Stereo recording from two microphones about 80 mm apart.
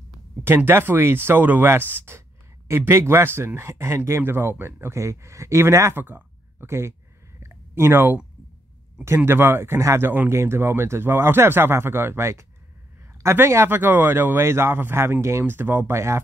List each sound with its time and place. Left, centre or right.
0.7 s speech: right
7.4 s a sound: right
9.0 s speech: right
10.0 s speech: right
10.3 s speech: right